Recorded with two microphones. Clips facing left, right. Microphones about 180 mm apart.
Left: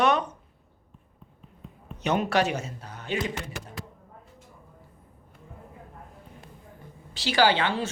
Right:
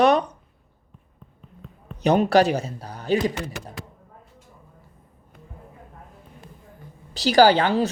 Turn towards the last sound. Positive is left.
turn(degrees=-40)  # may be behind; listen again after turning